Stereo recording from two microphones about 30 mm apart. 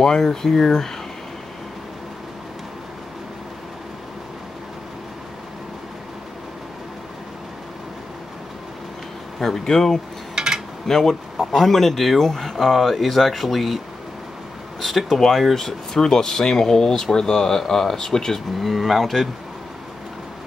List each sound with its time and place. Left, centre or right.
0.0 s speech: centre
9.4 s speech: centre
10.3 s a sound: right
10.9 s speech: centre
12.2 s speech: centre
14.8 s speech: centre
15.1 s speech: centre
18.6 s speech: centre